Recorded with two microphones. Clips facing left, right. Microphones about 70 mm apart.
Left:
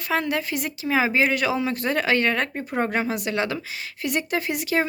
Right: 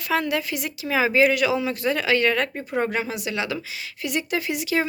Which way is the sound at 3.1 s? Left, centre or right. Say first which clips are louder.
Left 2 dB; left.